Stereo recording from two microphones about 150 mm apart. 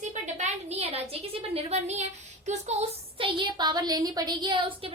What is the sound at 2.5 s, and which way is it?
A woman's voice, 45° right (ahead or behind).